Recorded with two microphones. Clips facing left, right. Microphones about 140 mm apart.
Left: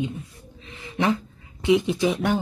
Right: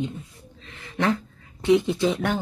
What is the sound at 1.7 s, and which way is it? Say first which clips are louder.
Speech: right 1 dB; 15° left (ahead or behind).